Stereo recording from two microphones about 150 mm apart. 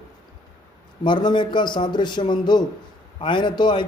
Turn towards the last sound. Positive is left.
turn(degrees=30)  # may be behind; listen again after turning